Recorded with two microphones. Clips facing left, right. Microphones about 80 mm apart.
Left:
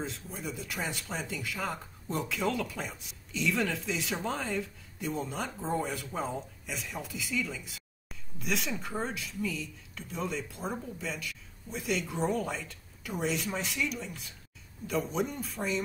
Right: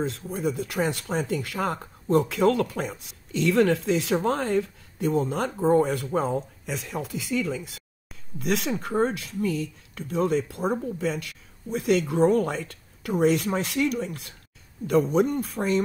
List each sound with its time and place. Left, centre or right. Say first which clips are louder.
0.0 s speech: right 11 dB; right
8.4 s speech: right 8 dB; right